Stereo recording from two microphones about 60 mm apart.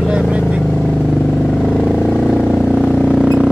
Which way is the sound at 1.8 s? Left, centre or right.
Centre.